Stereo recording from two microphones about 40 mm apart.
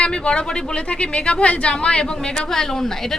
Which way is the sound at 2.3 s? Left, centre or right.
Centre.